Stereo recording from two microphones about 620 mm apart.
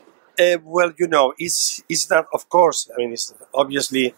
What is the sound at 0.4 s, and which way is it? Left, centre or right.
Speech, left.